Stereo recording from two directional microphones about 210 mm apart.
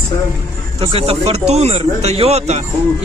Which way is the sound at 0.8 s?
25° right (ahead or behind).